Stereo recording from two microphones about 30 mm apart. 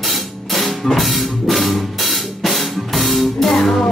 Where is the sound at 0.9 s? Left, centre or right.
Centre.